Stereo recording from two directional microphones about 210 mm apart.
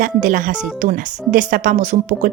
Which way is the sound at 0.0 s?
40° right (ahead or behind).